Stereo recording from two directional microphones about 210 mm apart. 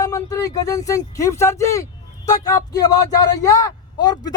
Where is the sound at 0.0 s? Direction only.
15° left (ahead or behind).